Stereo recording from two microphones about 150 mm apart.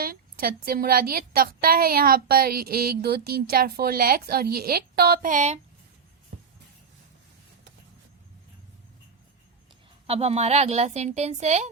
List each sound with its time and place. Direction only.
0.0 s a woman's voice: 75° right (ahead or behind); by 5.5 s 55° right (ahead or behind)
10.1 s a woman's voice: 45° right (ahead or behind)